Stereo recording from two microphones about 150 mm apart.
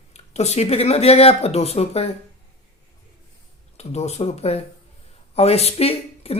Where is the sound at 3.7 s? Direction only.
45° left (ahead or behind).